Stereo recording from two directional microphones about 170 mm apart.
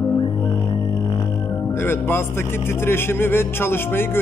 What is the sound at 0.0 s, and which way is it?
Speech, 25° left (ahead or behind).